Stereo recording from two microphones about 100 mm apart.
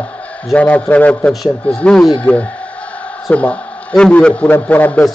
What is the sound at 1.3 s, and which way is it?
A man's voice, centre (ahead or behind).